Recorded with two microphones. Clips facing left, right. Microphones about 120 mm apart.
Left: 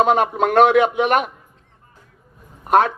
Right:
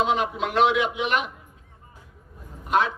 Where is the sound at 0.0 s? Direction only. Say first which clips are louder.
Left 7 dB; 50° left (ahead or behind).